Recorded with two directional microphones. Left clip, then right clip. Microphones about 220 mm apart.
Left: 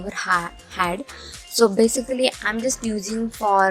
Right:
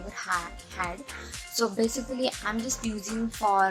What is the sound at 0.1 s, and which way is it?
Speech, 35° left (ahead or behind).